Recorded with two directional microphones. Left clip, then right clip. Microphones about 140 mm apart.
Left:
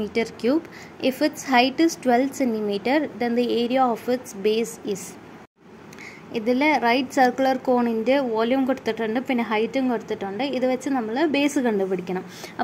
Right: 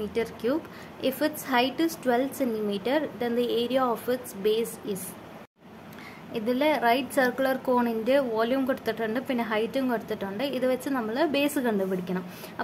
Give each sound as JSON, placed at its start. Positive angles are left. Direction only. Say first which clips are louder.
{"t": 0.0, "sound": "a woman's voice", "louder": "left 4 dB", "side_deg": 25}
{"t": 6.3, "sound": "a woman's voice", "louder": "left 4 dB", "side_deg": 20}